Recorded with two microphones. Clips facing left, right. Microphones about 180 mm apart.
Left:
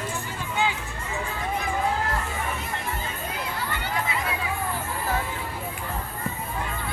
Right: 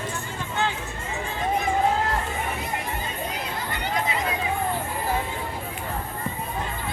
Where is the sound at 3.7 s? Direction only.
20° right (ahead or behind).